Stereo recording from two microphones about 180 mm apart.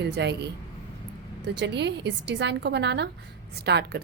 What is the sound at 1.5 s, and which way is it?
A woman's voice, 75° right (ahead or behind).